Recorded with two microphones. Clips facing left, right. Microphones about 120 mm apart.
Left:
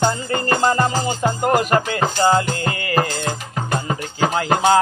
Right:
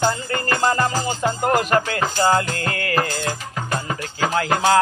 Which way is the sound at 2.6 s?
10° left (ahead or behind).